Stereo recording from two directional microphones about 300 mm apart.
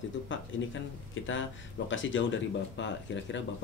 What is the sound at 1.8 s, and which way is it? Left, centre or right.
Speech, left.